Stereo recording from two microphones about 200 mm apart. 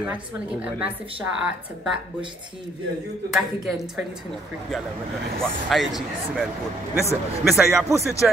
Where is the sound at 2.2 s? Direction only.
25° right (ahead or behind).